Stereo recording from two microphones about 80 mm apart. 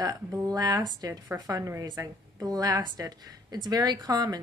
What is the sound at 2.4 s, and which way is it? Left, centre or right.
Speech, right.